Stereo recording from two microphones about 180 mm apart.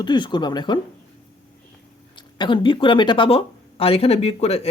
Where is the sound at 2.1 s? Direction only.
25° left (ahead or behind).